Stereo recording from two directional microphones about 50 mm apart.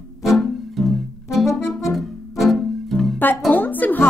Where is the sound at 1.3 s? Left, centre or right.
Centre.